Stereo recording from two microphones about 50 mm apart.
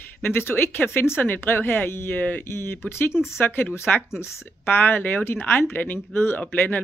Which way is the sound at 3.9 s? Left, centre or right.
Left.